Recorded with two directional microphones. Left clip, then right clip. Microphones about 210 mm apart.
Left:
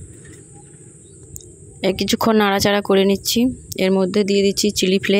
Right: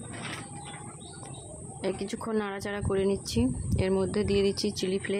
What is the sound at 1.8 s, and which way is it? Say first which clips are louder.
Speech: left 14 dB; 35° left (ahead or behind).